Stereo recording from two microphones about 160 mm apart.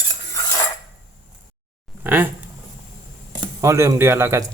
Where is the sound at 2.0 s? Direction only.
10° right (ahead or behind).